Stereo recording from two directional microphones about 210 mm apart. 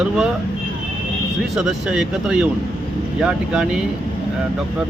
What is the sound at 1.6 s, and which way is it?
Speech, 5° right (ahead or behind).